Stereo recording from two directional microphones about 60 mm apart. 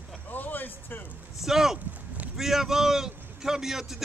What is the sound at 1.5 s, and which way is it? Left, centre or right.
A man's voice, centre.